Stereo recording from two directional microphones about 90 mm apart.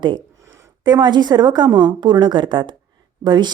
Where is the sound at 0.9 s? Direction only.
55° right (ahead or behind).